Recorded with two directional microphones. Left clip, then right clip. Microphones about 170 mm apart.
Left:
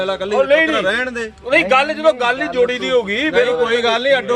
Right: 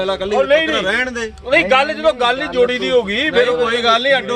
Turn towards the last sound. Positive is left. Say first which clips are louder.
# right 1 dB
turn(degrees=0)  # may be behind; listen again after turning